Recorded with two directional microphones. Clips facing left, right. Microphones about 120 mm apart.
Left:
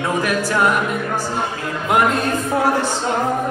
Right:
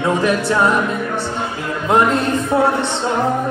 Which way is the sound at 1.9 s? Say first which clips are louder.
Right 2 dB; 25° right (ahead or behind).